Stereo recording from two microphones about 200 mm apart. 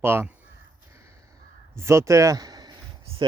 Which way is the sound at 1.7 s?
15° right (ahead or behind).